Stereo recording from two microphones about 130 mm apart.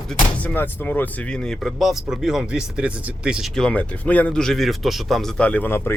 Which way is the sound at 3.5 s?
5° left (ahead or behind).